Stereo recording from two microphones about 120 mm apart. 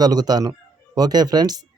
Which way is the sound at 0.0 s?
35° right (ahead or behind).